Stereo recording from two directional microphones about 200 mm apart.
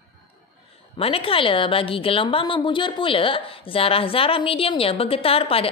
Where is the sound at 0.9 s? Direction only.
30° left (ahead or behind).